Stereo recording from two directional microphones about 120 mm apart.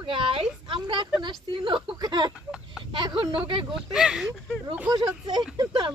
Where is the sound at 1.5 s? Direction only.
40° right (ahead or behind).